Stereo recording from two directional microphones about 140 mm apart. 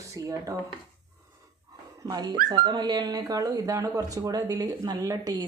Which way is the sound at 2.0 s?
30° right (ahead or behind).